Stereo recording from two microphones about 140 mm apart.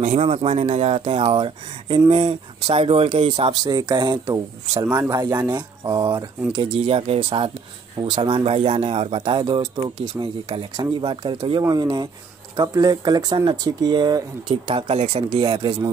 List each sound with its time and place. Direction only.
0.0 s speech: 45° right (ahead or behind); by 4.4 s 30° right (ahead or behind)
4.8 s speech: 20° right (ahead or behind)
6.5 s speech: 45° right (ahead or behind)
15.5 s speech: 25° right (ahead or behind)